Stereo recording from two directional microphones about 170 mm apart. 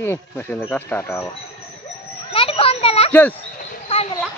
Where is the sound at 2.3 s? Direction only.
35° left (ahead or behind).